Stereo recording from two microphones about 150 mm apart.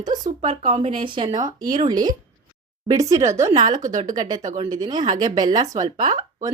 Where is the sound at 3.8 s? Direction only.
55° right (ahead or behind).